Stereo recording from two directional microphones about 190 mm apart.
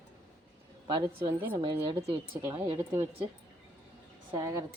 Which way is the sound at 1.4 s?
20° right (ahead or behind).